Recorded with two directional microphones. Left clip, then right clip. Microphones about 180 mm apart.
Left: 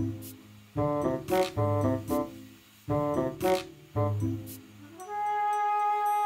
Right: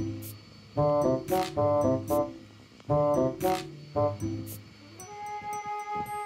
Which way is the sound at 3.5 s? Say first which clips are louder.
Left 1 dB; 10° left (ahead or behind).